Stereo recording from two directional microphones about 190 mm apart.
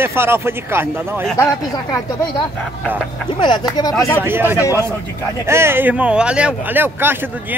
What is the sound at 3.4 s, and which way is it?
Speech, 25° left (ahead or behind).